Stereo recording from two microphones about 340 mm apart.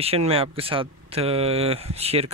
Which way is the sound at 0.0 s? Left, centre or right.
Centre.